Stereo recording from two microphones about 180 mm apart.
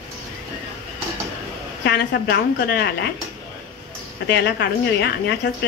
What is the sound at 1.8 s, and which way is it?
A woman's voice, 65° left (ahead or behind).